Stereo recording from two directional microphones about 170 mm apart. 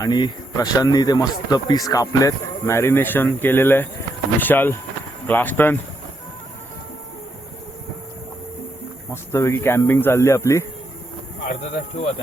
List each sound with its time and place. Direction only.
0.0 s speech: 25° left (ahead or behind)
9.3 s speech: 15° left (ahead or behind)